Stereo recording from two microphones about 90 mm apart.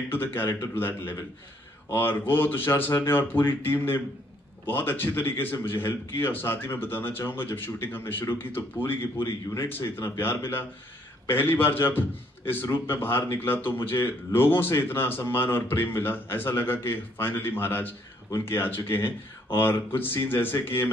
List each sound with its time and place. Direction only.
0.1 s speech: 25° left (ahead or behind)